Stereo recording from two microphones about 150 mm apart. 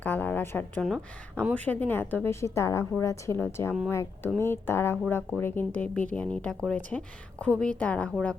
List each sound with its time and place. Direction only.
0.0 s a sound: 10° left (ahead or behind)
0.9 s speech: centre (ahead or behind)
1.5 s a woman's voice: 10° left (ahead or behind)